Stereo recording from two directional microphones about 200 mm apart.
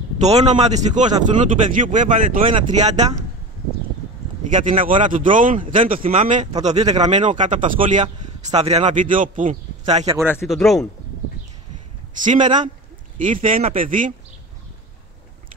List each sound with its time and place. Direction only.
0.2 s speech: 35° right (ahead or behind)
4.5 s speech: 40° right (ahead or behind)
10.5 s speech: centre (ahead or behind)
12.2 s speech: 35° right (ahead or behind)